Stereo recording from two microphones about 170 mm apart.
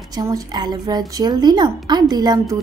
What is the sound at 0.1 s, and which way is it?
A woman's voice, 20° right (ahead or behind).